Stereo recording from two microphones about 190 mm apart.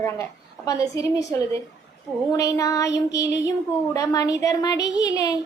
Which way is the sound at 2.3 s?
20° left (ahead or behind).